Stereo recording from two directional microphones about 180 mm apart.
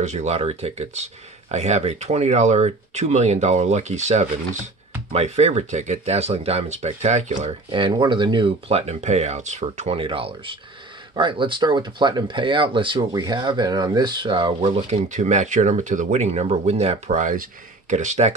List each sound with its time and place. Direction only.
0.0 s speech: 40° right (ahead or behind)